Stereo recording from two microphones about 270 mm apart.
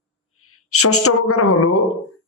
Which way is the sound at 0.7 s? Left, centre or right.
Left.